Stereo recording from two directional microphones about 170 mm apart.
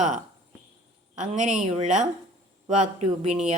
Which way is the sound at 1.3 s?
45° right (ahead or behind).